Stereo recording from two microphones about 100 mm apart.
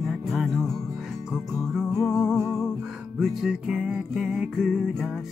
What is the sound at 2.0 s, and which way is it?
Music, 35° left (ahead or behind).